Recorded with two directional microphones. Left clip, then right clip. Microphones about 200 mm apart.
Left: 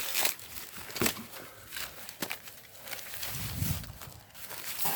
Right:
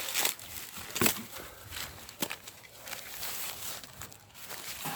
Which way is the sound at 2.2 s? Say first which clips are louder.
Right 1 dB; 45° right (ahead or behind).